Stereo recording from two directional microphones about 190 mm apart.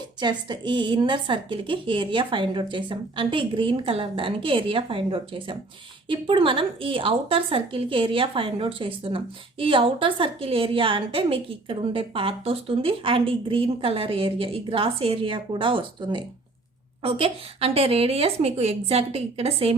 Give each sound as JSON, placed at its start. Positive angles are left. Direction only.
{"t": 0.2, "sound": "a woman's voice", "side_deg": -25}